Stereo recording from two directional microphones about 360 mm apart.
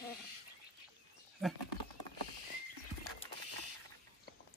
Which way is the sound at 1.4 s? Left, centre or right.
Centre.